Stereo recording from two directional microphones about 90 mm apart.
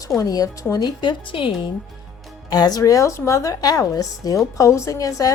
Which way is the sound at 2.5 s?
45° left (ahead or behind).